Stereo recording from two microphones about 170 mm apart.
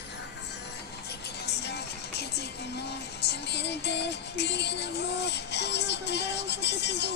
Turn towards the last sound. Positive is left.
turn(degrees=80)